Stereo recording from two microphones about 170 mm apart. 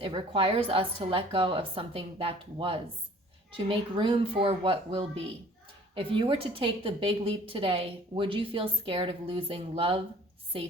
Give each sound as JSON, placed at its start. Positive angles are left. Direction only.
{"t": 0.0, "sound": "a woman's voice", "side_deg": -30}